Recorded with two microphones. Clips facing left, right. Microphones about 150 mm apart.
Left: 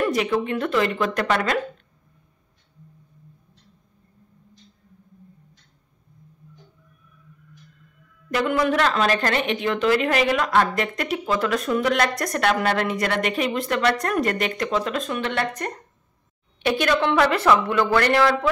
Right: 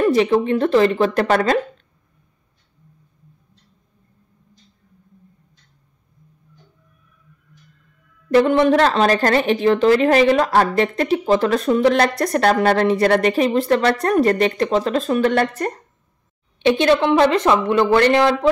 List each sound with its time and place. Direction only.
0.0 s a woman's voice: 30° right (ahead or behind)
8.3 s a woman's voice: 30° right (ahead or behind)
16.6 s speech: 25° right (ahead or behind)